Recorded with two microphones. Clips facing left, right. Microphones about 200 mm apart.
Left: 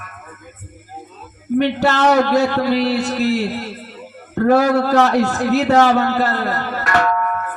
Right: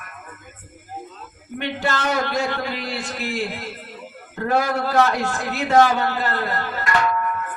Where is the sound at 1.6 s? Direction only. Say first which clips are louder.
Left 8 dB; 40° left (ahead or behind).